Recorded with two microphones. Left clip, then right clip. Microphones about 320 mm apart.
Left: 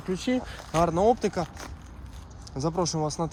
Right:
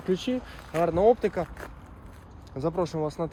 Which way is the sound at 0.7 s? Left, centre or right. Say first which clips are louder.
Right 1 dB; centre.